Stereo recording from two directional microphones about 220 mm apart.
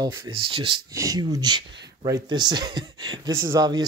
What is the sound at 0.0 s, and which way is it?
Speech, 15° right (ahead or behind).